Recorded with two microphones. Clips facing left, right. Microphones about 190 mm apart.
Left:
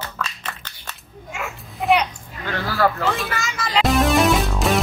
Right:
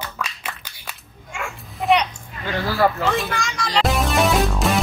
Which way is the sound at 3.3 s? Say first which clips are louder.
Even; 5° left (ahead or behind).